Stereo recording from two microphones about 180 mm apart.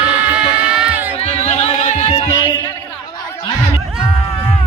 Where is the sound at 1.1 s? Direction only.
35° left (ahead or behind).